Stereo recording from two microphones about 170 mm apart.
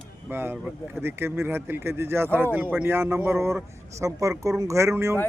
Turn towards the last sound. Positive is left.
turn(degrees=-15)  # may be behind; listen again after turning